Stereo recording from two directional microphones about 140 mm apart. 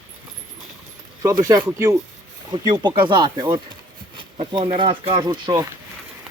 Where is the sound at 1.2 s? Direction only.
25° right (ahead or behind).